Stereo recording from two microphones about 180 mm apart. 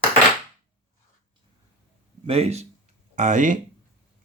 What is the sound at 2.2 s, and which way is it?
Speech, 35° right (ahead or behind).